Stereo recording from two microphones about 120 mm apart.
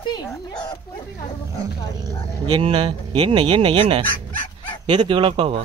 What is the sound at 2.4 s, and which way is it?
Speech, 45° right (ahead or behind).